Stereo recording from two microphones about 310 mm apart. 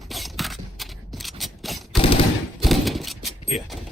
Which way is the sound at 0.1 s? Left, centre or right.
Centre.